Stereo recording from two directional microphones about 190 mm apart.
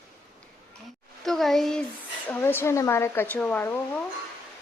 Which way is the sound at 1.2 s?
Centre (ahead or behind).